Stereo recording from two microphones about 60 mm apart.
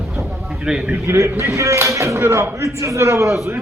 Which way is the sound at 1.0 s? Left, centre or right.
Right.